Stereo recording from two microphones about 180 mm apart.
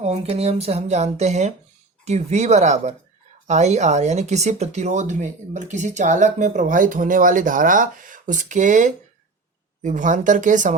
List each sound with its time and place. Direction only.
0.0 s speech: 35° right (ahead or behind)